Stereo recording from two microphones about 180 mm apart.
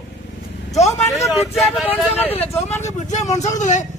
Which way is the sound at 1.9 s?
10° left (ahead or behind).